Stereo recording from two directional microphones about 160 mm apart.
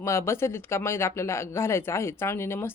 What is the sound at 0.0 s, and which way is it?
Speech, 15° left (ahead or behind).